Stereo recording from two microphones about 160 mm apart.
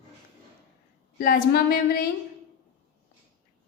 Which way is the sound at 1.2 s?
70° left (ahead or behind).